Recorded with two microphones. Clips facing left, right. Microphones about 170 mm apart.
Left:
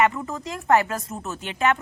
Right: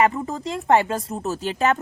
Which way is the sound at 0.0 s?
35° right (ahead or behind).